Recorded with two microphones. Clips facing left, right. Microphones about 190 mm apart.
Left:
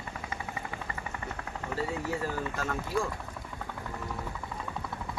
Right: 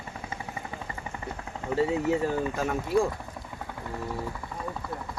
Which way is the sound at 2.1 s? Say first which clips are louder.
Right 7 dB; 20° right (ahead or behind).